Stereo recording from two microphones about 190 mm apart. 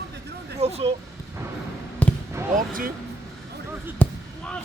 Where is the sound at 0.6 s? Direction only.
35° right (ahead or behind).